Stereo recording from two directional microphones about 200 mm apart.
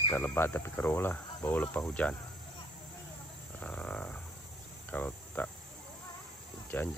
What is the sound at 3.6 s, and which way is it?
Frog, 5° left (ahead or behind).